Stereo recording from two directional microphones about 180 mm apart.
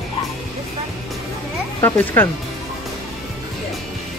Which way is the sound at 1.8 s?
10° left (ahead or behind).